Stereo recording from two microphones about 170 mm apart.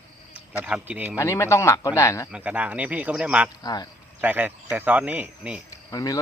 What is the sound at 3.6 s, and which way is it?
Speech, 25° left (ahead or behind).